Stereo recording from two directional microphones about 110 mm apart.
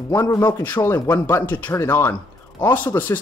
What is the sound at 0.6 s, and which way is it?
Speech, 15° left (ahead or behind).